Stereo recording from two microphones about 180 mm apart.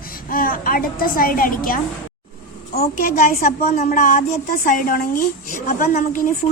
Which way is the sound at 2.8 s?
55° left (ahead or behind).